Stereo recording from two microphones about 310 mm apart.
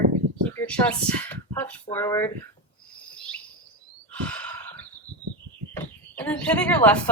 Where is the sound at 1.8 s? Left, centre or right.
Centre.